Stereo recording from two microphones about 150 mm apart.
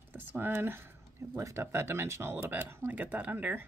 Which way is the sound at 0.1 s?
10° right (ahead or behind).